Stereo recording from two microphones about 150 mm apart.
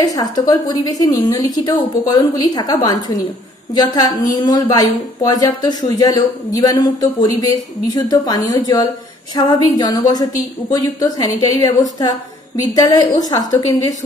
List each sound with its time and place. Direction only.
0.0 s a woman's voice: 25° left (ahead or behind)
12.7 s a woman's voice: 25° left (ahead or behind)